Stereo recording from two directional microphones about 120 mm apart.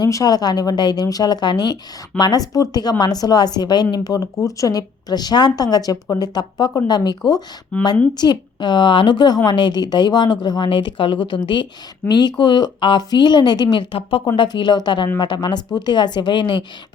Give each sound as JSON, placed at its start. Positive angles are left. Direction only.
{"t": 0.0, "sound": "a woman's voice", "side_deg": 30}
{"t": 7.7, "sound": "speech", "side_deg": 15}
{"t": 8.1, "sound": "a woman's voice", "side_deg": 35}